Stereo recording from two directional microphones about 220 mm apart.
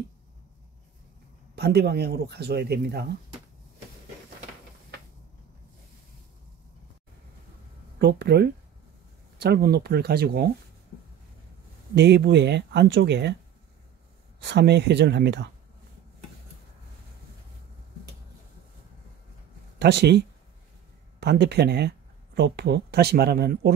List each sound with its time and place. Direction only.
1.5 s speech: 45° right (ahead or behind)
8.0 s speech: 50° right (ahead or behind)
11.9 s speech: 50° right (ahead or behind)
14.4 s speech: 50° right (ahead or behind)
19.8 s speech: 50° right (ahead or behind)